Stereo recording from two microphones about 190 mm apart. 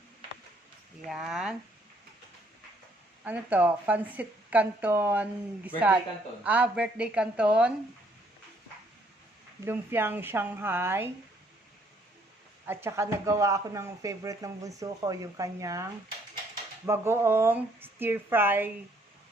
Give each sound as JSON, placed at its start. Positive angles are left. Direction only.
{"t": 1.1, "sound": "a woman's voice", "side_deg": -5}
{"t": 3.2, "sound": "a woman's voice", "side_deg": -10}
{"t": 9.6, "sound": "speech", "side_deg": -10}
{"t": 12.6, "sound": "speech", "side_deg": -15}